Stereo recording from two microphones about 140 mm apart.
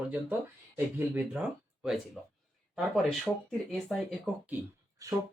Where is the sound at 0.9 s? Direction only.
10° right (ahead or behind).